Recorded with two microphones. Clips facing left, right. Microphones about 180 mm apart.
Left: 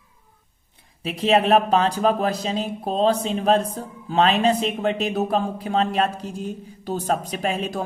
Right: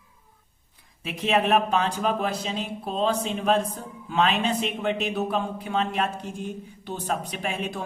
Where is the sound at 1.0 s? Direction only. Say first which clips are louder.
Left 5 dB; 30° left (ahead or behind).